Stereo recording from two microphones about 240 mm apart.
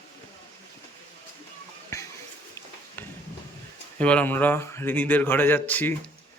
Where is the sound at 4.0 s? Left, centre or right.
Centre.